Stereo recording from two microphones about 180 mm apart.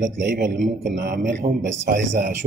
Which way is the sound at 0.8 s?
50° right (ahead or behind).